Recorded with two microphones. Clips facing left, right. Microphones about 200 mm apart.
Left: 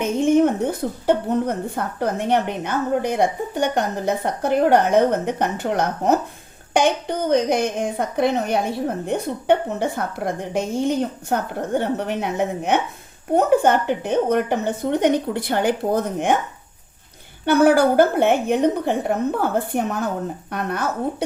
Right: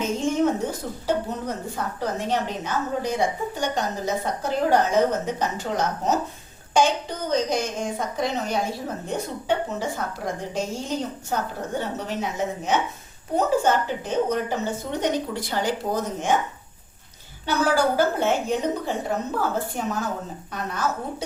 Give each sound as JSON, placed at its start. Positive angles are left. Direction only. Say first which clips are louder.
{"t": 0.0, "sound": "speech", "louder": "left 6 dB", "side_deg": 60}
{"t": 17.4, "sound": "speech", "louder": "left 7 dB", "side_deg": 60}